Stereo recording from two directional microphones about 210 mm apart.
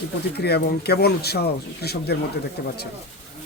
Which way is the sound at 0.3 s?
50° left (ahead or behind).